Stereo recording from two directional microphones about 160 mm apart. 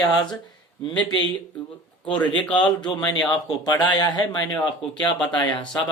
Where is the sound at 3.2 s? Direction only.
25° left (ahead or behind).